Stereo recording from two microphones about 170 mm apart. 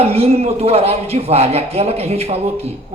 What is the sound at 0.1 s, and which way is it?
A man's voice, 35° right (ahead or behind).